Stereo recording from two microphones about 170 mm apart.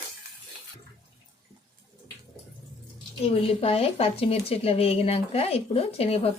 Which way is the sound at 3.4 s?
35° left (ahead or behind).